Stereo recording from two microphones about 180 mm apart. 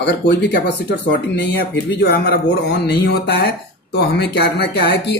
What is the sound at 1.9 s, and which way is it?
A man's voice, 70° left (ahead or behind).